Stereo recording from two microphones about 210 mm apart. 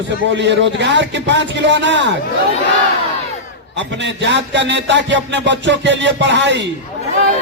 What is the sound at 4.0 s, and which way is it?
Music, 55° right (ahead or behind).